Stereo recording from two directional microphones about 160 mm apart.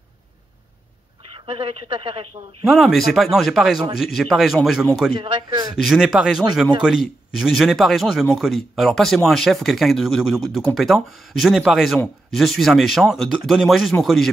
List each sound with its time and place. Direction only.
1.3 s speech: 35° right (ahead or behind)
2.7 s speech: centre (ahead or behind)
5.2 s a man's voice: 30° right (ahead or behind)
5.8 s speech: centre (ahead or behind)